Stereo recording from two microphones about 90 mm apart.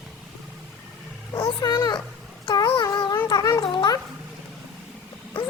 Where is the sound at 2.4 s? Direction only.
65° left (ahead or behind).